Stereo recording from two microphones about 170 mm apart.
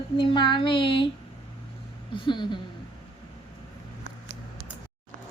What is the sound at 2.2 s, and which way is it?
Speech, 30° left (ahead or behind).